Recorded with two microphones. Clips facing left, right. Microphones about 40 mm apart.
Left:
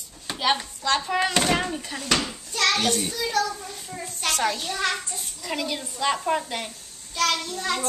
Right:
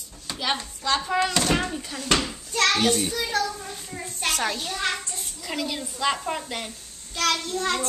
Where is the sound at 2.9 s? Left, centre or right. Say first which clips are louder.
Right 2 dB; centre.